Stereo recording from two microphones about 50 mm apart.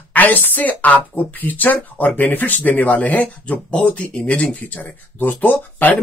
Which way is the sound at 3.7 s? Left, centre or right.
Left.